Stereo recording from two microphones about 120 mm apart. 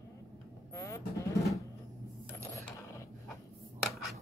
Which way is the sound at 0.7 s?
25° left (ahead or behind).